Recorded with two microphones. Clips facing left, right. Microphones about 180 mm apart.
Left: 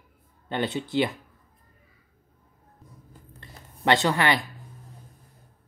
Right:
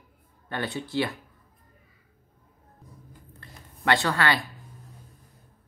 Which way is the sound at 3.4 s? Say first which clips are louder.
Left 3 dB; 20° left (ahead or behind).